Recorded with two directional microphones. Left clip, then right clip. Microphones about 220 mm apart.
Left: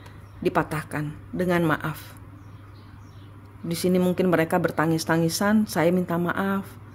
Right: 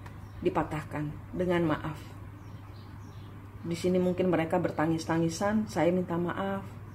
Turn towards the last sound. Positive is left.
turn(degrees=50)  # may be behind; listen again after turning